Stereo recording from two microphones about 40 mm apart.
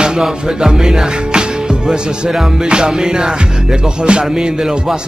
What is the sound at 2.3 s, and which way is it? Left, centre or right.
Music, centre.